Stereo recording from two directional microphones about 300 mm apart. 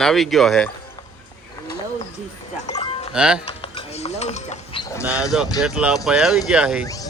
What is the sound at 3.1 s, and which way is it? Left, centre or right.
Speech, centre.